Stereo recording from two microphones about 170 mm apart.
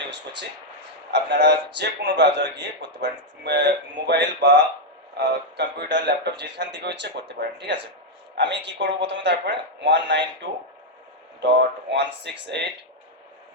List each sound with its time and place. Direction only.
1.1 s speech: 90° right
11.3 s speech: 90° right